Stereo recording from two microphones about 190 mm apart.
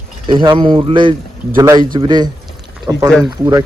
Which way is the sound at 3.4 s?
15° right (ahead or behind).